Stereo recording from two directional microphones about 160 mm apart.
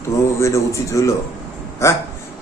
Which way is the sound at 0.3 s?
20° left (ahead or behind).